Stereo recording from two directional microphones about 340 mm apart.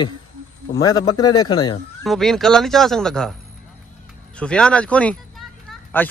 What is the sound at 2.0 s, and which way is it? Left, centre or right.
Speech, centre.